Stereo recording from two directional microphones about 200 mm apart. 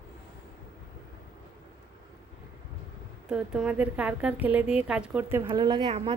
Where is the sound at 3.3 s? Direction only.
5° right (ahead or behind).